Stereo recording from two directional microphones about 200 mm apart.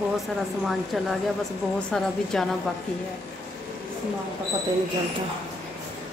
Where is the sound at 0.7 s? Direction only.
Centre (ahead or behind).